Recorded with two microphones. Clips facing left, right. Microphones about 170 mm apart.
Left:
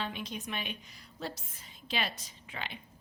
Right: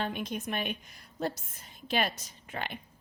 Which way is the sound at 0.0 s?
50° right (ahead or behind).